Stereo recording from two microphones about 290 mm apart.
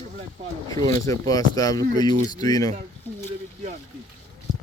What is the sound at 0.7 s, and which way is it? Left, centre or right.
Speech, centre.